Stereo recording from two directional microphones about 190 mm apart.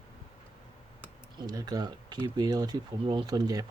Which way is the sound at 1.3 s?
20° right (ahead or behind).